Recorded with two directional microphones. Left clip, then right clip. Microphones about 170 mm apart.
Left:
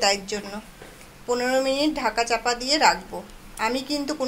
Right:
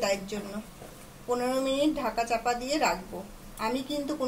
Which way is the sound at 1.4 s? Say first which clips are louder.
Left 5 dB; 25° left (ahead or behind).